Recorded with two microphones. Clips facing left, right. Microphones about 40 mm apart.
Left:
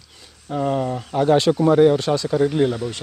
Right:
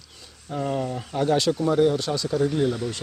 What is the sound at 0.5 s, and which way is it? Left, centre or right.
Speech, centre.